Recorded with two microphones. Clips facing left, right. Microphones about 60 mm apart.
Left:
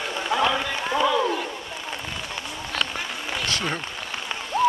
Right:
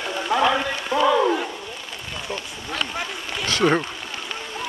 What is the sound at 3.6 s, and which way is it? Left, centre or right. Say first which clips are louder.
Speech: right 14 dB; right.